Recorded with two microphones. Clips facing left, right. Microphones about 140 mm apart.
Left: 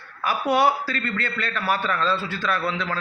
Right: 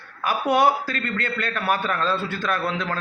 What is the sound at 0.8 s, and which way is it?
A man's voice, 45° right (ahead or behind).